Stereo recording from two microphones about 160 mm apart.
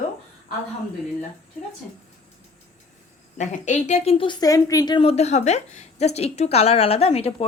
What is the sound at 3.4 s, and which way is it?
A woman's voice, 50° left (ahead or behind).